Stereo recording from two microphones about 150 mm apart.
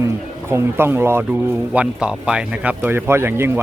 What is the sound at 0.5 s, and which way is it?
Speech, 15° right (ahead or behind).